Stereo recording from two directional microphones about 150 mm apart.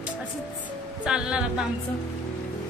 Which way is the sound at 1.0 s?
5° right (ahead or behind).